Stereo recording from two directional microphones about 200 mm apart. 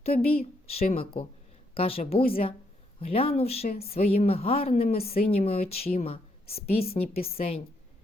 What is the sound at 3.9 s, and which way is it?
A woman's voice, 30° left (ahead or behind).